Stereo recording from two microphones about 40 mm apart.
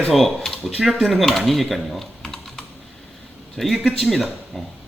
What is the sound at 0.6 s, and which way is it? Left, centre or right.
Speech, centre.